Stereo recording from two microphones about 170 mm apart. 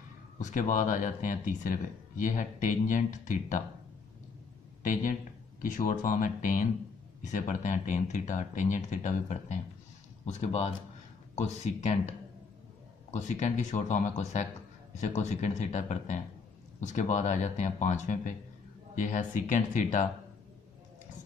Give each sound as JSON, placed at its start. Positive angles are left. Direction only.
{"t": 0.4, "sound": "speech", "side_deg": 50}
{"t": 5.6, "sound": "speech", "side_deg": 50}